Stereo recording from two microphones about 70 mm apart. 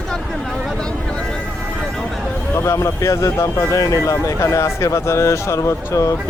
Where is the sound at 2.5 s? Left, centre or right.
Left.